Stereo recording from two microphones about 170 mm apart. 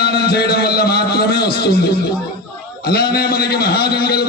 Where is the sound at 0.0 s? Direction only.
70° left (ahead or behind).